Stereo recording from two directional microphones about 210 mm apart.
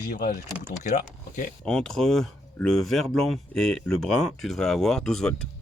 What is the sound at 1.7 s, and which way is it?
Speech, 5° left (ahead or behind).